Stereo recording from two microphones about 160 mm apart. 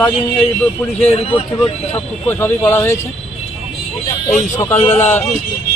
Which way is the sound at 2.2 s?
15° left (ahead or behind).